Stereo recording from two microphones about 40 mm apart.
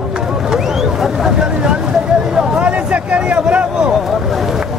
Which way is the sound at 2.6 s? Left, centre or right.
Right.